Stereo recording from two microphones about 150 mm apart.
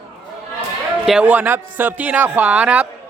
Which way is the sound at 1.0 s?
5° right (ahead or behind).